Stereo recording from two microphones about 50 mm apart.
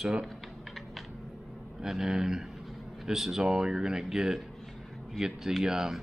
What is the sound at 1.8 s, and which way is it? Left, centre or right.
Speech, centre.